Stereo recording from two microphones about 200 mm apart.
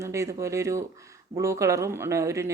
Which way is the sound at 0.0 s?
15° right (ahead or behind).